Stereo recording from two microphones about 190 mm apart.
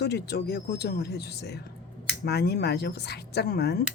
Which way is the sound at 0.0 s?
60° left (ahead or behind).